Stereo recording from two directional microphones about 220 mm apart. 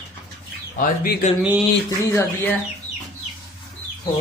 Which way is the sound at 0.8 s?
35° left (ahead or behind).